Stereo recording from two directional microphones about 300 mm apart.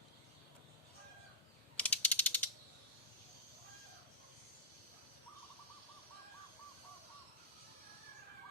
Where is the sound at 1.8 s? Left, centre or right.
Centre.